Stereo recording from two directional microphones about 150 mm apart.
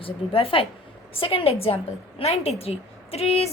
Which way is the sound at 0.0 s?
40° left (ahead or behind).